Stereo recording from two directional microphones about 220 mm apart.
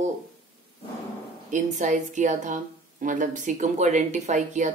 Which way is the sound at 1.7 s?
35° right (ahead or behind).